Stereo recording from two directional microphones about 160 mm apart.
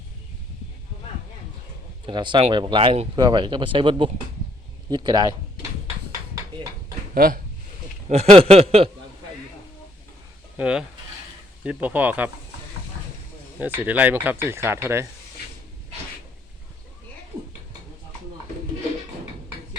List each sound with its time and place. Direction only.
2.0 s speech: 30° right (ahead or behind)
7.1 s speech: 60° right (ahead or behind)
8.0 s speech: 40° right (ahead or behind)
10.6 s speech: 5° right (ahead or behind)
13.6 s speech: 10° right (ahead or behind)